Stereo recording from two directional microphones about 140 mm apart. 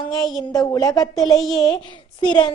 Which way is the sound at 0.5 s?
25° left (ahead or behind).